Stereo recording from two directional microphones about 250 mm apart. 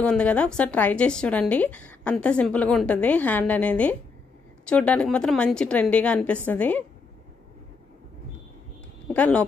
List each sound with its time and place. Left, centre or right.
0.0 s a woman's voice: centre
9.1 s a woman's voice: centre